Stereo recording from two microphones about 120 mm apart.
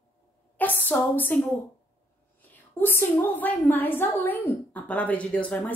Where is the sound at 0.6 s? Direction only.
15° left (ahead or behind).